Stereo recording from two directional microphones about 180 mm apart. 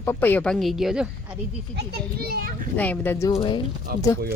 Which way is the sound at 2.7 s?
10° left (ahead or behind).